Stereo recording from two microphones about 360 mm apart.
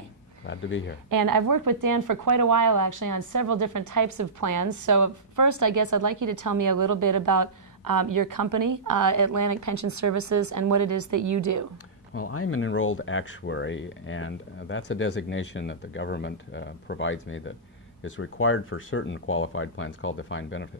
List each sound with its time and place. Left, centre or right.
0.5 s speech: left
1.1 s speech: right
12.2 s speech: left